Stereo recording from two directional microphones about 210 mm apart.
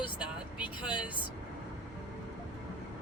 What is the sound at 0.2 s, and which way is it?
Vehicle, 5° right (ahead or behind).